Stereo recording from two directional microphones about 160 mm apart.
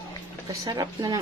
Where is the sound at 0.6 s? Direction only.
20° right (ahead or behind).